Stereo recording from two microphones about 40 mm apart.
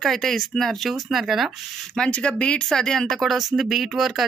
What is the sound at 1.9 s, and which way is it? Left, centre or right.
Speech, left.